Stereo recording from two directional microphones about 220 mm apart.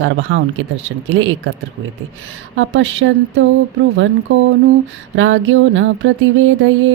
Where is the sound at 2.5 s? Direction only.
60° right (ahead or behind).